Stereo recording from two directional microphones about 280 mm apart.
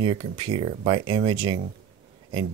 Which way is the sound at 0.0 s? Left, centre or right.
Centre.